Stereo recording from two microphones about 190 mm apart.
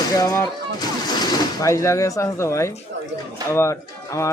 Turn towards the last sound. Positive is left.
turn(degrees=15)  # may be behind; listen again after turning